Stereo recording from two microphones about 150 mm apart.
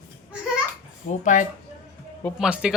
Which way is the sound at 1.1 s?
60° left (ahead or behind).